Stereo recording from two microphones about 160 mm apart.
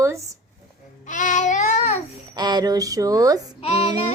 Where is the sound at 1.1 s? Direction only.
50° left (ahead or behind).